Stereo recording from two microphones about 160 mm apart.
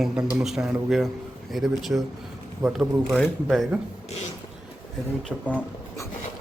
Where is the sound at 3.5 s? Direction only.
5° right (ahead or behind).